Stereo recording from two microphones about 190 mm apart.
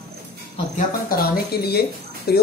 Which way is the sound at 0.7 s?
55° left (ahead or behind).